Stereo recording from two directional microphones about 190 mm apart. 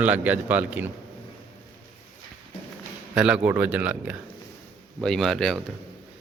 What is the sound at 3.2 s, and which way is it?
A man's voice, 5° right (ahead or behind).